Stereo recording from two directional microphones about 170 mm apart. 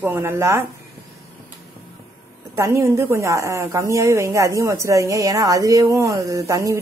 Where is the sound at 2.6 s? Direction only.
15° right (ahead or behind).